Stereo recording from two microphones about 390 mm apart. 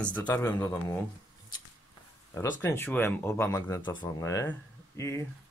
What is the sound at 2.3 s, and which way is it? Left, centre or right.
Speech, centre.